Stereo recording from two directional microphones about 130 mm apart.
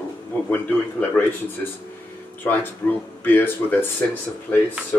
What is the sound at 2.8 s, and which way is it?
Speech, 20° left (ahead or behind).